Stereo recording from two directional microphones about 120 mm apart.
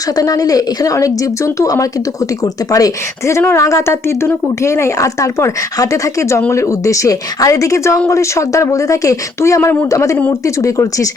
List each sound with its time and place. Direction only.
0.2 s speech: 30° left (ahead or behind)